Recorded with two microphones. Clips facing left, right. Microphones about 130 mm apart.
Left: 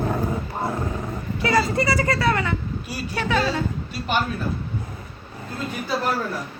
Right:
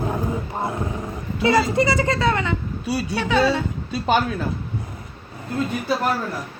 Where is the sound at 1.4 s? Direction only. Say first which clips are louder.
Right 3 dB; 20° right (ahead or behind).